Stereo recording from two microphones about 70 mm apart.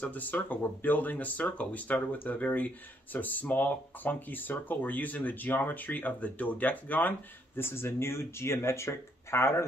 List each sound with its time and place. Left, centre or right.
0.0 s speech: left